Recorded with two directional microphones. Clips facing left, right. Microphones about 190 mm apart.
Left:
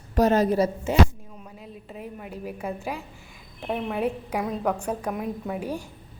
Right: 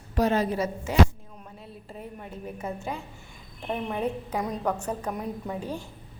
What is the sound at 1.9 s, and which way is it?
A woman's voice, 5° left (ahead or behind).